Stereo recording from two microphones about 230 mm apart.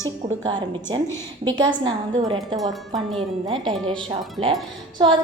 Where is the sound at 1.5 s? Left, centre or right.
Right.